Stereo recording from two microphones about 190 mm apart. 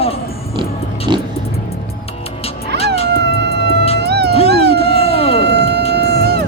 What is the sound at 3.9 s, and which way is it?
Cat, 60° right (ahead or behind).